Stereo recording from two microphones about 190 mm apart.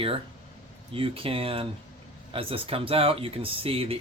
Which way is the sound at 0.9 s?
30° right (ahead or behind).